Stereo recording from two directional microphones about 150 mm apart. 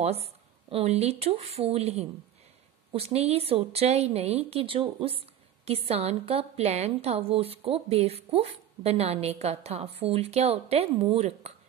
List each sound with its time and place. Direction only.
0.0 s a woman's voice: 45° right (ahead or behind)